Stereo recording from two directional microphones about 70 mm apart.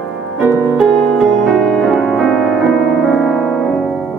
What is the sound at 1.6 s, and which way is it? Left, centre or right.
Music, centre.